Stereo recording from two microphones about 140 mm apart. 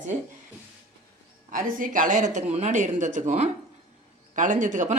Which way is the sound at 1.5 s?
80° right.